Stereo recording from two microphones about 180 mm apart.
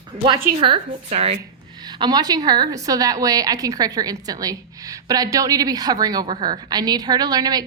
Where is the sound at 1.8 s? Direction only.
25° right (ahead or behind).